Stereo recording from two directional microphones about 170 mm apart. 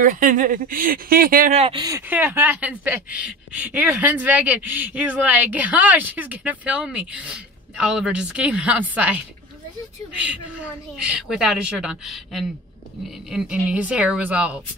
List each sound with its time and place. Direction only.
0.0 s speech: 55° right (ahead or behind)
1.5 s speech: 35° right (ahead or behind)
1.8 s a woman's voice: 20° right (ahead or behind)